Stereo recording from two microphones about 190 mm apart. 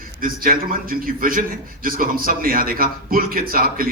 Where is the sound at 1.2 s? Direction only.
45° right (ahead or behind).